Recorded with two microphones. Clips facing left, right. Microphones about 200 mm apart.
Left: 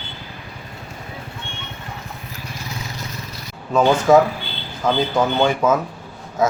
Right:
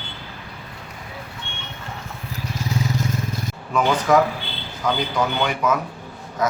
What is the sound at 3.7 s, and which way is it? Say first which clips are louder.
Speech: left 5 dB; 30° left (ahead or behind).